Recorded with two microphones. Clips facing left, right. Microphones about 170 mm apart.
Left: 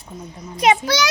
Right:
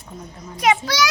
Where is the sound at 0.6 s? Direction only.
25° left (ahead or behind).